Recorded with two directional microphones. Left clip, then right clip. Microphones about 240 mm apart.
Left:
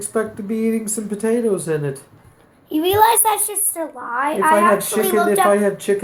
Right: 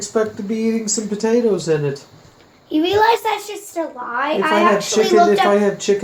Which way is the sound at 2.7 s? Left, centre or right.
Left.